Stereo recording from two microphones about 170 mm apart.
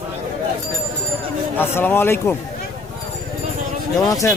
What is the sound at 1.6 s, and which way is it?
Speech, 15° left (ahead or behind).